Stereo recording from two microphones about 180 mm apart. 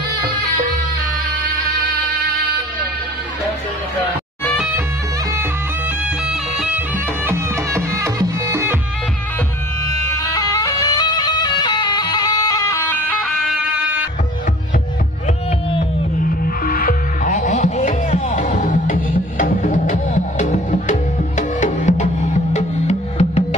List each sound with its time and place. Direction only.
7.2 s music: 15° right (ahead or behind)
10.0 s music: 20° left (ahead or behind); by 14.0 s 10° right (ahead or behind)
16.3 s music: 55° left (ahead or behind); by 23.4 s 40° left (ahead or behind)